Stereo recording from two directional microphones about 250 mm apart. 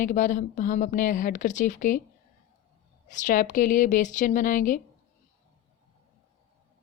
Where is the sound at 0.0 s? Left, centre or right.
Left.